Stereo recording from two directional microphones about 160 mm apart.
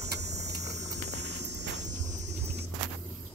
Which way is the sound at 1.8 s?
50° right (ahead or behind).